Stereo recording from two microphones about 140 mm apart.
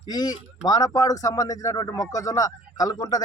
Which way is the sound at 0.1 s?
30° left (ahead or behind).